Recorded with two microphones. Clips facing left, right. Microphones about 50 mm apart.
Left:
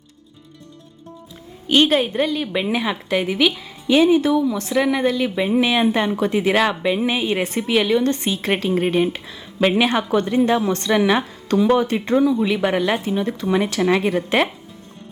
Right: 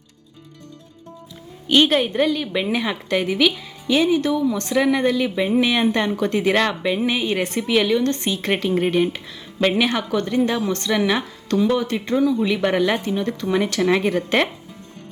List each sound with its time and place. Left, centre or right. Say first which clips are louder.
1.9 s a woman's voice: even; centre
9.9 s a woman's voice: left 3 dB; left
11.7 s a woman's voice: left 3 dB; left; by 14.2 s centre